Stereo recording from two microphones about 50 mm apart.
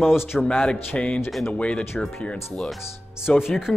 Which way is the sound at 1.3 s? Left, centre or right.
Centre.